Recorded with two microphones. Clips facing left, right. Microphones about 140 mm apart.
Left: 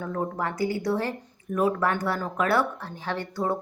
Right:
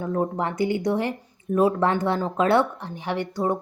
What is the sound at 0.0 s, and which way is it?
Speech, 20° right (ahead or behind).